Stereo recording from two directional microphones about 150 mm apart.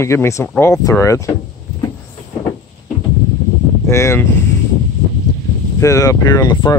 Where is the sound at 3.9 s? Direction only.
20° left (ahead or behind).